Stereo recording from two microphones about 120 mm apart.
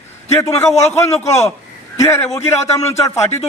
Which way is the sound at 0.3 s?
20° left (ahead or behind).